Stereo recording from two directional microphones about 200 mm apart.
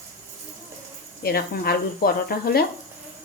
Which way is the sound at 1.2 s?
50° left (ahead or behind).